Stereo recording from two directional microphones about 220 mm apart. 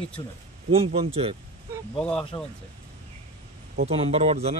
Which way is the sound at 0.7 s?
25° right (ahead or behind).